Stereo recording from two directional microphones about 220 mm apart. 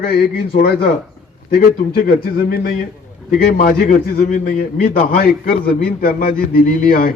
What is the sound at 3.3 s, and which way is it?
A man's voice, 40° left (ahead or behind).